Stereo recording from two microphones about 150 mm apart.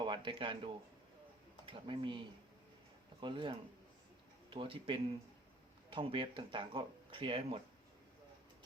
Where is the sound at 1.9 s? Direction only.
35° right (ahead or behind).